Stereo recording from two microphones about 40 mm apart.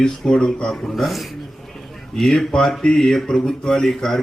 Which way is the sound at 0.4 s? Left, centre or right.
Centre.